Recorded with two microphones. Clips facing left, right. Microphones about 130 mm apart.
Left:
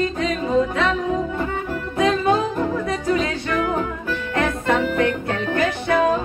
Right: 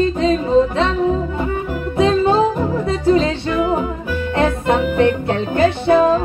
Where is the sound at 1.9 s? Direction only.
30° right (ahead or behind).